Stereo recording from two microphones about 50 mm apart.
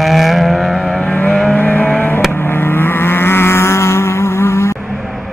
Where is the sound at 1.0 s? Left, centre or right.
Left.